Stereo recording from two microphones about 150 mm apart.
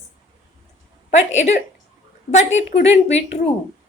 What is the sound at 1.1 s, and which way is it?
A woman's voice, 50° left (ahead or behind).